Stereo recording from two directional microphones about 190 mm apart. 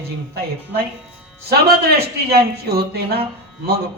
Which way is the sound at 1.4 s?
55° right (ahead or behind).